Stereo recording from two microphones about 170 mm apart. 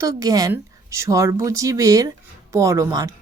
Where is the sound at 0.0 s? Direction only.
20° right (ahead or behind).